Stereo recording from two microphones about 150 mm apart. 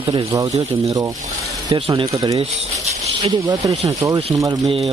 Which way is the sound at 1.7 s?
35° right (ahead or behind).